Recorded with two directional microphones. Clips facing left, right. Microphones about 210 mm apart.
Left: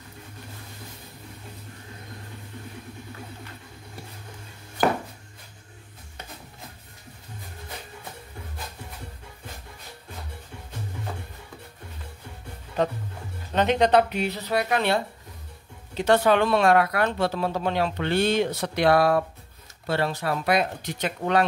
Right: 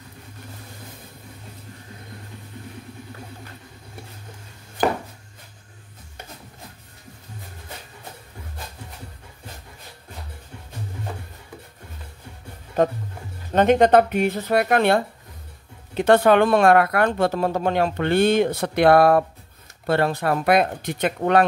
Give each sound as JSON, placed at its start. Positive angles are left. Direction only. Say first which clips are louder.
{"t": 13.5, "sound": "speech", "louder": "right 5 dB", "side_deg": -50}